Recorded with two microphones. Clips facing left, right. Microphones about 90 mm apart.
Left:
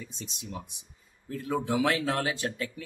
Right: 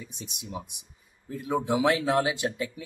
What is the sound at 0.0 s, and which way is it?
Speech, 15° right (ahead or behind).